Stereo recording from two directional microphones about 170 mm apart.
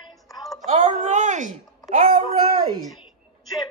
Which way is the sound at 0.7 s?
45° right (ahead or behind).